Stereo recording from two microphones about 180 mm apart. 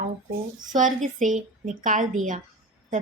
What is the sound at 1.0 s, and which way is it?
A woman's voice, 45° right (ahead or behind).